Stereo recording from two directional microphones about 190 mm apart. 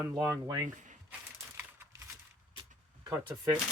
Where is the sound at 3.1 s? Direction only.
15° right (ahead or behind).